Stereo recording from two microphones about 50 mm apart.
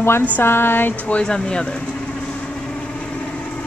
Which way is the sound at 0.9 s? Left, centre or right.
Left.